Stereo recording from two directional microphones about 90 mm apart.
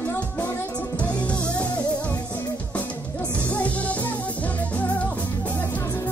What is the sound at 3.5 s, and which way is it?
Music, 15° left (ahead or behind).